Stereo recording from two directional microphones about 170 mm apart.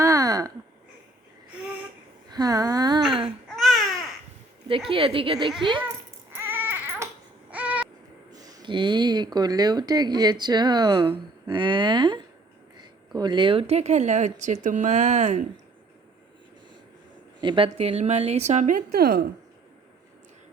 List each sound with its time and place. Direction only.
0.0 s a sound: 20° right (ahead or behind)
2.3 s a sound: 20° right (ahead or behind)
3.1 s babbling: 30° right (ahead or behind)
3.5 s babbling: centre (ahead or behind)
4.9 s a woman's voice: 30° right (ahead or behind)
6.3 s baby cry: 10° right (ahead or behind)
7.5 s a sound: 10° right (ahead or behind)
8.3 s a woman's voice: 20° right (ahead or behind); by 15.4 s 45° right (ahead or behind)
17.4 s a woman's voice: 30° right (ahead or behind)
18.9 s speech: 70° right (ahead or behind)